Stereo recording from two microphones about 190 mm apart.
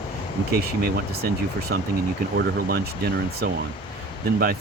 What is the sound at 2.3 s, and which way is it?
Speech, 55° right (ahead or behind).